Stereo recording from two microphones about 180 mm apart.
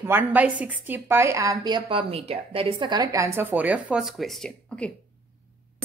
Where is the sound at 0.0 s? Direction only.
10° right (ahead or behind); by 4.9 s 5° left (ahead or behind).